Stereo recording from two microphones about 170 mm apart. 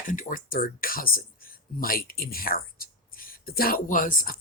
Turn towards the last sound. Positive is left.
turn(degrees=55)  # may be behind; listen again after turning